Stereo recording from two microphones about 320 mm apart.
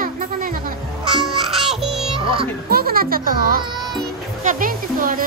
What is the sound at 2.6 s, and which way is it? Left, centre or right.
A child's voice, right.